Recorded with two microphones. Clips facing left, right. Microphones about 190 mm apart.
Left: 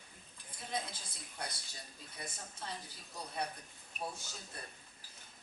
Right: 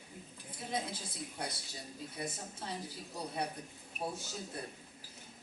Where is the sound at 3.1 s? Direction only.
25° right (ahead or behind).